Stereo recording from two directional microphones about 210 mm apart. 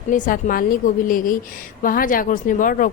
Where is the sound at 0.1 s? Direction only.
40° left (ahead or behind).